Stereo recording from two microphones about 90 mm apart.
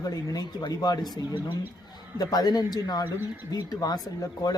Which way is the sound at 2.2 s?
50° left (ahead or behind).